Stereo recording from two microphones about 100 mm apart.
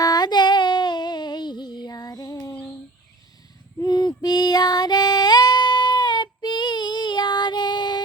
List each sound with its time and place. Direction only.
0.0 s music: 45° left (ahead or behind)
3.8 s female singing: 45° left (ahead or behind)